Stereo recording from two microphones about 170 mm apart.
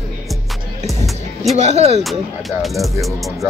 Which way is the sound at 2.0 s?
Centre (ahead or behind).